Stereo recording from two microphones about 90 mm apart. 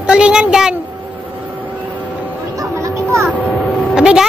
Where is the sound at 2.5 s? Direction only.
35° right (ahead or behind).